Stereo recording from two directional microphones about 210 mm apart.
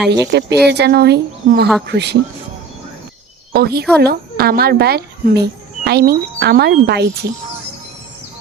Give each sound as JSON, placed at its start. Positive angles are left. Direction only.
{"t": 0.3, "sound": "speech", "side_deg": -55}
{"t": 3.5, "sound": "speech", "side_deg": -50}